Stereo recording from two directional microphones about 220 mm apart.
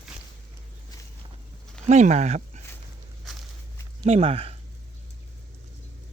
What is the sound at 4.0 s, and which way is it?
Speech, 25° right (ahead or behind).